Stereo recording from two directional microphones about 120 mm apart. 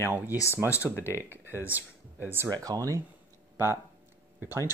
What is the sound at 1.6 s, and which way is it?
Speech, 15° right (ahead or behind).